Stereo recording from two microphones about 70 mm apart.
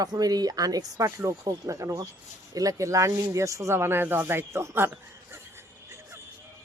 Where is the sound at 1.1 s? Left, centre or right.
Right.